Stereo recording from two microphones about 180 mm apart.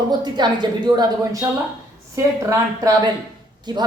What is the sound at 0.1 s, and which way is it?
A woman's voice, 25° right (ahead or behind).